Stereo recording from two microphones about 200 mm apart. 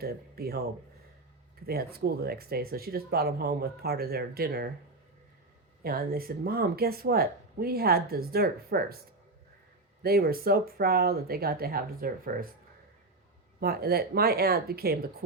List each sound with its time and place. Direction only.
0.0 s speech: 50° right (ahead or behind)
1.6 s speech: 50° right (ahead or behind)
5.8 s speech: 50° right (ahead or behind)
10.0 s speech: 50° right (ahead or behind)
13.6 s speech: 50° right (ahead or behind)